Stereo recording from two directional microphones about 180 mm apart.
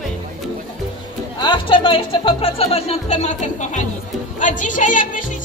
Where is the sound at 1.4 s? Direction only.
25° left (ahead or behind).